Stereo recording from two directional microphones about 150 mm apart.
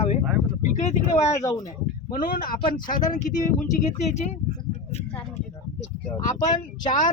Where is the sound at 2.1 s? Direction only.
70° left (ahead or behind); by 4.2 s 45° left (ahead or behind).